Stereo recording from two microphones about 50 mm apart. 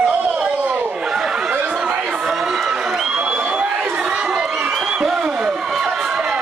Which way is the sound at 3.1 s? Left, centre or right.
Centre.